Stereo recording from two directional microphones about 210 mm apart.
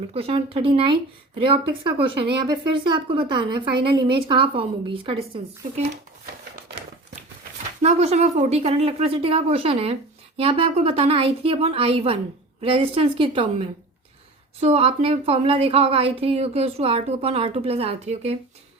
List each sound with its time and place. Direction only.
0.1 s speech: 30° right (ahead or behind)
7.8 s speech: 30° right (ahead or behind)